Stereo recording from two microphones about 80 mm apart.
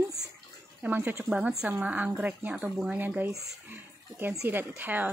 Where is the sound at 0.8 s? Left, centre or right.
Right.